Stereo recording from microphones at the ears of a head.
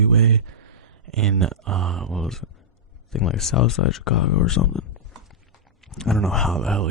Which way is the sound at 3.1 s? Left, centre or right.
Left.